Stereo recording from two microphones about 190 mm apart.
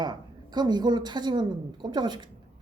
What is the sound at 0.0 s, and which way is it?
A woman's voice, 20° right (ahead or behind).